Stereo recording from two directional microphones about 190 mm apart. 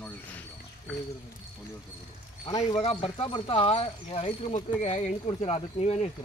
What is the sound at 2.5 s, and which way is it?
Speech, 20° left (ahead or behind).